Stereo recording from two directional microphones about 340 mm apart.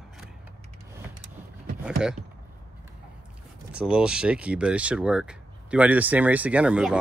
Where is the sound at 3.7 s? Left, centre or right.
Centre.